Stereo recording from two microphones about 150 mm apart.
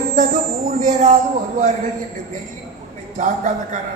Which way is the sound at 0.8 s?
60° right (ahead or behind).